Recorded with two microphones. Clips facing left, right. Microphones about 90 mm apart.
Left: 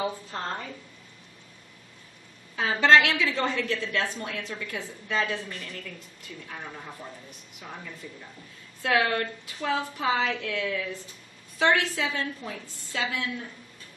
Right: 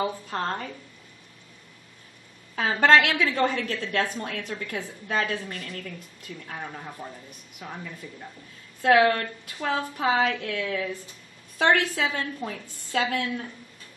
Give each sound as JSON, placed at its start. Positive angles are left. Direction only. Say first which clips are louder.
{"t": 2.5, "sound": "a woman's voice", "louder": "right 1 dB", "side_deg": -50}
{"t": 8.8, "sound": "a woman's voice", "louder": "right 5 dB", "side_deg": -55}